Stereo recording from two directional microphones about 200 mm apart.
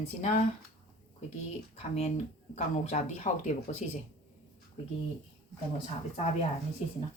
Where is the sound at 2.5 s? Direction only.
35° left (ahead or behind).